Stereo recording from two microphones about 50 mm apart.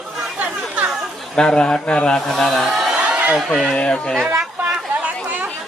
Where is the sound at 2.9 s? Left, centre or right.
Right.